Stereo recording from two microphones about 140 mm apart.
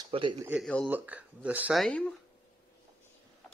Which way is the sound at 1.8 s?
5° left (ahead or behind).